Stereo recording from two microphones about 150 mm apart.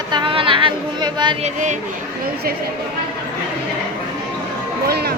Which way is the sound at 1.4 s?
50° right (ahead or behind).